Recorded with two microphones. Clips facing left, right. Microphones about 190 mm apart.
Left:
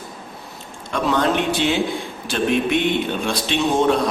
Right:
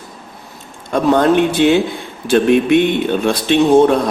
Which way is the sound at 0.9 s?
50° right (ahead or behind).